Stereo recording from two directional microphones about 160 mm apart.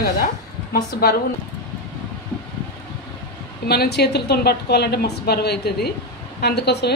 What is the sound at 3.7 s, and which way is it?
Speech, 90° left.